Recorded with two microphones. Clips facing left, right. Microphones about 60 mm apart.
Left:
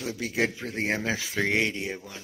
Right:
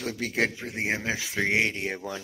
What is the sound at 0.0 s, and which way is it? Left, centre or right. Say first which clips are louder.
Speech: even; right.